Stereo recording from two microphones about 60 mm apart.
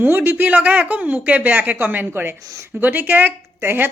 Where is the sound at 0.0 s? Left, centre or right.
Right.